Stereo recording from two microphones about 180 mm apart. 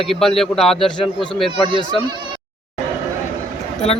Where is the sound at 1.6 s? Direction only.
25° right (ahead or behind).